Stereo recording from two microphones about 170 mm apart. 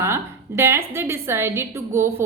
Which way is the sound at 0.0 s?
15° right (ahead or behind).